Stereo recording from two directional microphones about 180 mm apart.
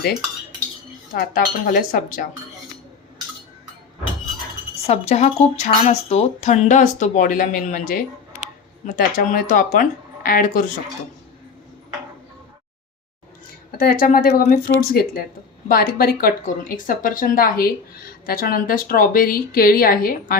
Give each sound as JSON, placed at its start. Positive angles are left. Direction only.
{"t": 1.1, "sound": "speech", "side_deg": 55}
{"t": 4.9, "sound": "speech", "side_deg": 35}
{"t": 13.7, "sound": "speech", "side_deg": 55}